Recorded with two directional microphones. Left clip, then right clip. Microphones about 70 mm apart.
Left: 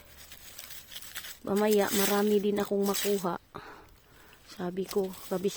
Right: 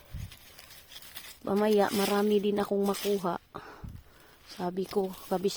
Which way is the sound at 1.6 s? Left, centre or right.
Right.